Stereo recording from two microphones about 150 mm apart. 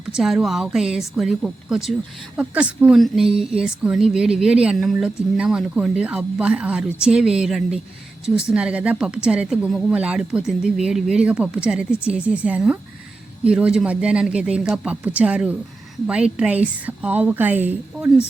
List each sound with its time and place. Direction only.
0.1 s a woman's voice: 5° right (ahead or behind)